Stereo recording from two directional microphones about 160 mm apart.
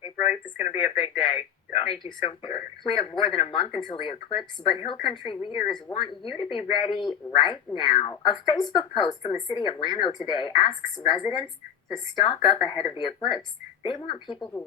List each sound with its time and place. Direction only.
0.6 s speech: 35° left (ahead or behind)
11.9 s speech: 30° left (ahead or behind)